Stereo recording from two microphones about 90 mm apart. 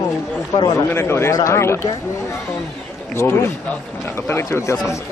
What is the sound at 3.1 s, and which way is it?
Speech, 30° left (ahead or behind).